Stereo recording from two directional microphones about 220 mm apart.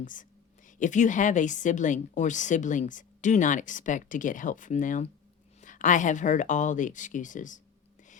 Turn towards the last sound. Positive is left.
turn(degrees=35)  # may be behind; listen again after turning